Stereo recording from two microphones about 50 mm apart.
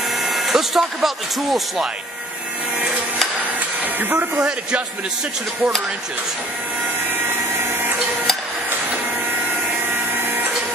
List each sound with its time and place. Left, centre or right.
0.2 s speech: centre
4.0 s speech: right
9.7 s a sound: right